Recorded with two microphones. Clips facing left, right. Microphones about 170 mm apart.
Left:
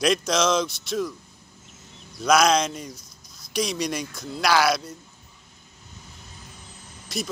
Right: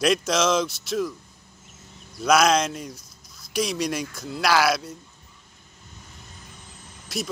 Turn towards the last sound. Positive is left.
turn(degrees=-5)  # may be behind; listen again after turning